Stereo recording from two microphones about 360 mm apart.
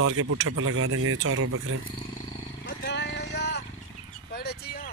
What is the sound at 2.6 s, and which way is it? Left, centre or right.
Vehicle, left.